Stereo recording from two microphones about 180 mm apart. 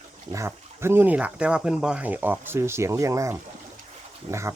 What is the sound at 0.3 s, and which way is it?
Speech, 15° right (ahead or behind).